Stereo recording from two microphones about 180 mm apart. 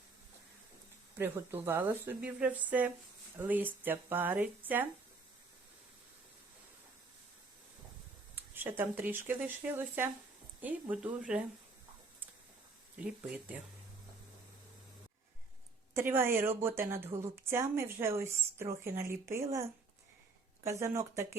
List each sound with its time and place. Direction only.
1.2 s a woman's voice: 10° right (ahead or behind)
8.4 s a woman's voice: 10° right (ahead or behind)
13.5 s a woman's voice: 10° right (ahead or behind)
16.0 s a woman's voice: 15° right (ahead or behind)
20.7 s a woman's voice: 15° right (ahead or behind)